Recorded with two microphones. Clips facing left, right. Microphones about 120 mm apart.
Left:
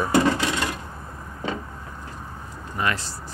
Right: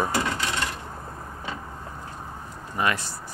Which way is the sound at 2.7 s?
15° right (ahead or behind).